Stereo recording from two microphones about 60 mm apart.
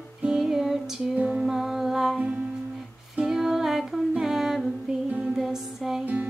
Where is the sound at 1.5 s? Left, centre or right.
Centre.